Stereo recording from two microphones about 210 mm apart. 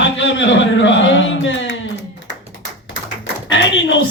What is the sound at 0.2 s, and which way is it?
Music, 60° left (ahead or behind).